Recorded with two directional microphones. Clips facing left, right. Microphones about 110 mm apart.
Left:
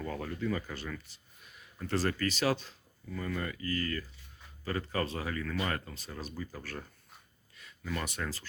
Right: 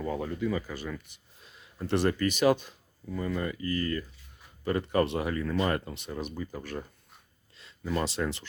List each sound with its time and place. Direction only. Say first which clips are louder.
0.0 s speech: right 5 dB; 15° right (ahead or behind)
1.4 s speech: right 5 dB; 30° right (ahead or behind)
6.1 s speech: right 5 dB; 20° right (ahead or behind)